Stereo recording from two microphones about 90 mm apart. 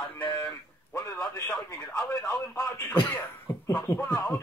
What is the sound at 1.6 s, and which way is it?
Speech, 30° left (ahead or behind).